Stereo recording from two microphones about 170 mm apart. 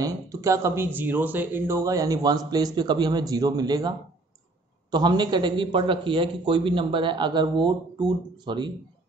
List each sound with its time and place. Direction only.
0.0 s speech: 20° right (ahead or behind)
4.9 s speech: 25° right (ahead or behind)